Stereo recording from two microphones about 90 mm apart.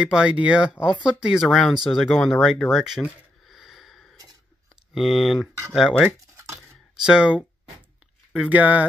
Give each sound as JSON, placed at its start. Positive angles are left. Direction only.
{"t": 0.0, "sound": "speech", "side_deg": -10}
{"t": 3.4, "sound": "wheeze", "side_deg": 0}
{"t": 4.9, "sound": "speech", "side_deg": -5}
{"t": 6.3, "sound": "a sound", "side_deg": -35}
{"t": 7.0, "sound": "speech", "side_deg": -10}